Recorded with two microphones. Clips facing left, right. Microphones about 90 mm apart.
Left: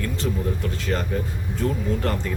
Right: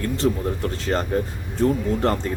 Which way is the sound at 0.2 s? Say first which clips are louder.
Right 4 dB; 35° right (ahead or behind).